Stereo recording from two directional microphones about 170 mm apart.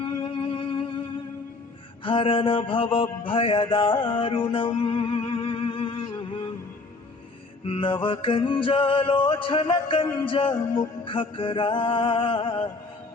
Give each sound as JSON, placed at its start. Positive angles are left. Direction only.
{"t": 0.0, "sound": "music", "side_deg": 30}
{"t": 2.0, "sound": "mantra", "side_deg": 30}
{"t": 7.6, "sound": "music", "side_deg": 30}